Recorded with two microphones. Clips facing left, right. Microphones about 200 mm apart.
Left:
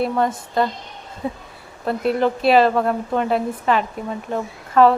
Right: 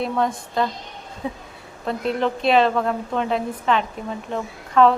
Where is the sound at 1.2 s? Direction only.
5° left (ahead or behind).